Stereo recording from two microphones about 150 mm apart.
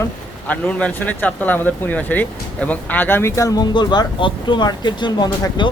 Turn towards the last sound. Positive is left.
turn(degrees=30)  # may be behind; listen again after turning